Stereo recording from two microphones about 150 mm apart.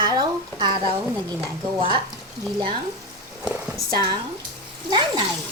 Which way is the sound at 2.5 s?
30° right (ahead or behind).